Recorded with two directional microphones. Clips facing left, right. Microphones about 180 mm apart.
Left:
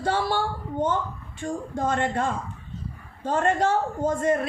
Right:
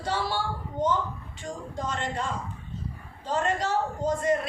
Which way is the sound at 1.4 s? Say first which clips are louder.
Left 7 dB; 55° left (ahead or behind).